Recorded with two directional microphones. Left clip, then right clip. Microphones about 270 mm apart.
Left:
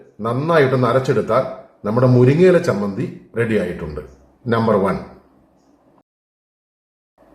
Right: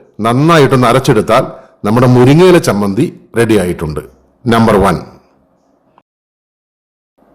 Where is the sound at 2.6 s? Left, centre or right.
Right.